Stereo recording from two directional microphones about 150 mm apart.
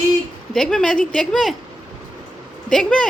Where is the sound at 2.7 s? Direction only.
5° left (ahead or behind).